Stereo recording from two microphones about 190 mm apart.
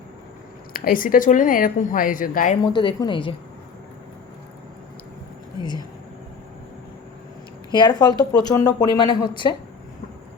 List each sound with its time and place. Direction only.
0.7 s a woman's voice: 50° left (ahead or behind)
2.7 s speech: 25° left (ahead or behind)
7.7 s speech: 20° left (ahead or behind)